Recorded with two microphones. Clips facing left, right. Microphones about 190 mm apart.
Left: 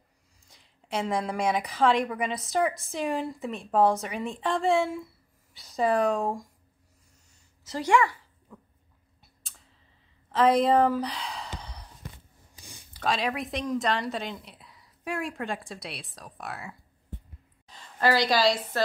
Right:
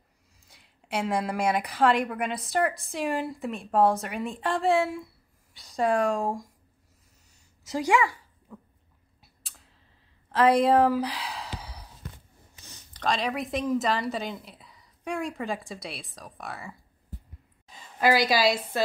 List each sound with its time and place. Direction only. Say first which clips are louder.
0.5 s a woman's voice: even; centre (ahead or behind)
7.6 s a sound: even; 10° right (ahead or behind)
9.2 s typing: right 1 dB; centre (ahead or behind)
10.3 s sigh: right 1 dB; centre (ahead or behind)
12.6 s a woman's voice: even; 10° left (ahead or behind)
17.7 s a woman's voice: right 1 dB; 10° right (ahead or behind)